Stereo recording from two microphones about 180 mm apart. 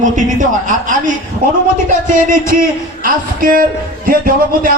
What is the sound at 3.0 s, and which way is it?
Speech, 50° right (ahead or behind).